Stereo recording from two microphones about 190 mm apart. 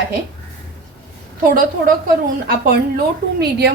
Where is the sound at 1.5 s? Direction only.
45° right (ahead or behind).